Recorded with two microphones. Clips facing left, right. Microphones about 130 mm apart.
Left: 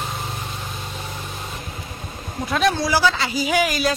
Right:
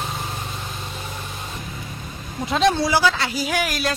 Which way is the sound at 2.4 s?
25° right (ahead or behind).